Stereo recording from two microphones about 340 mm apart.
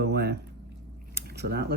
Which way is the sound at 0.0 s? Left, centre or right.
Right.